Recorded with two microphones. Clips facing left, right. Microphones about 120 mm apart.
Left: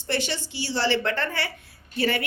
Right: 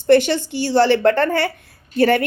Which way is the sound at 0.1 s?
55° right (ahead or behind).